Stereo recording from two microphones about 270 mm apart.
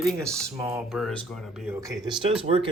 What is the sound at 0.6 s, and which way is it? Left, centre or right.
Speech, centre.